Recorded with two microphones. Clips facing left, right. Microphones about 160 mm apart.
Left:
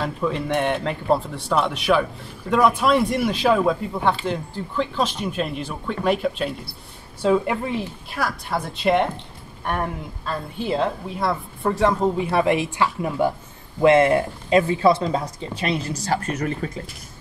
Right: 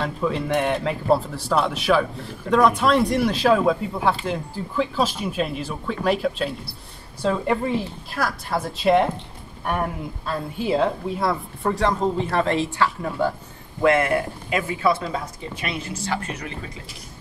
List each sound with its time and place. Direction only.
0.0 s speech: centre (ahead or behind); by 16.7 s 45° left (ahead or behind)